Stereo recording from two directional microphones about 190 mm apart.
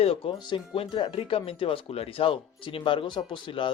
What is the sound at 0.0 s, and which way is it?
Speech, 30° left (ahead or behind).